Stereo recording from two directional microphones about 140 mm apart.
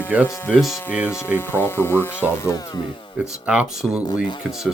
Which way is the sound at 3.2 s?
5° right (ahead or behind).